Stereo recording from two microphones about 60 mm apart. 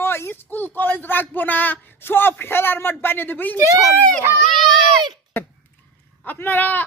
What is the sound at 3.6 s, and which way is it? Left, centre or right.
Speech, right.